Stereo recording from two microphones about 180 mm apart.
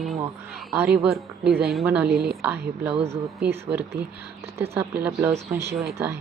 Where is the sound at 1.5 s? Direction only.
60° right (ahead or behind).